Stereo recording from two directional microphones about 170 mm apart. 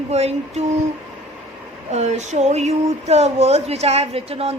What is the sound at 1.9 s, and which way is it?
Speech, 40° right (ahead or behind).